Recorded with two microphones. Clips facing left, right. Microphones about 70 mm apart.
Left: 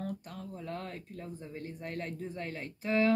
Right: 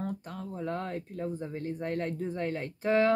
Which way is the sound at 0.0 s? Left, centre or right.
Right.